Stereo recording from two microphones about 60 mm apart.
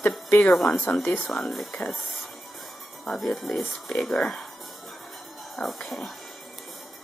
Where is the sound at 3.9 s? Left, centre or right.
Centre.